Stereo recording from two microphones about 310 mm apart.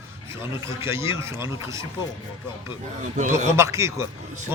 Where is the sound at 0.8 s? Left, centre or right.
Centre.